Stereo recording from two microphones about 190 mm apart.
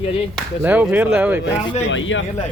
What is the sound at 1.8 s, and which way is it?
Speech, 80° left.